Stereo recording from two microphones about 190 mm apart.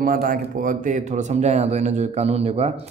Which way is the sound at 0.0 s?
45° right (ahead or behind).